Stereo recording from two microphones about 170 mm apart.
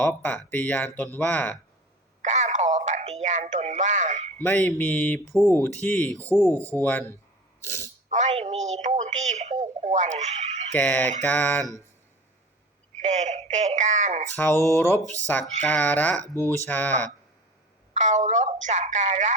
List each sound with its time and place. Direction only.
0.0 s speech: 10° left (ahead or behind)
2.2 s a sound: 45° right (ahead or behind)
4.4 s speech: 10° left (ahead or behind)
6.6 s speech: 15° right (ahead or behind)
8.1 s a woman's voice: 40° right (ahead or behind)
11.2 s speech: 10° left (ahead or behind)
13.0 s a woman's voice: 45° right (ahead or behind)
14.3 s speech: 15° left (ahead or behind)
17.9 s a woman's voice: 45° right (ahead or behind)